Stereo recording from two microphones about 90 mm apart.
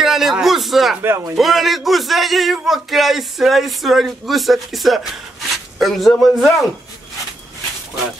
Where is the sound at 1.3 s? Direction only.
Centre (ahead or behind).